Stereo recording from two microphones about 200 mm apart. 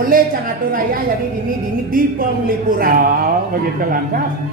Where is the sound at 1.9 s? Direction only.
45° right (ahead or behind).